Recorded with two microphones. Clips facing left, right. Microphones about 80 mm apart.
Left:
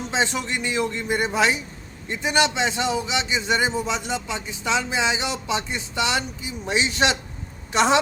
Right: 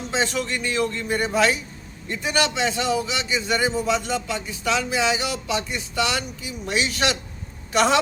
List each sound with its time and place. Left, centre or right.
0.1 s a man's voice: left